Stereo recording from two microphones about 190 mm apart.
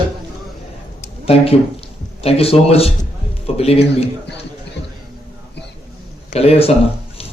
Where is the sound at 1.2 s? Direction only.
30° left (ahead or behind).